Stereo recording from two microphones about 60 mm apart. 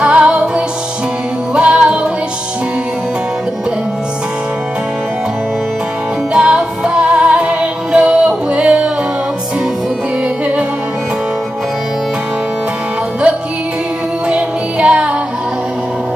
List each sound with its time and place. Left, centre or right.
0.0 s music: right
6.3 s music: centre
14.3 s music: centre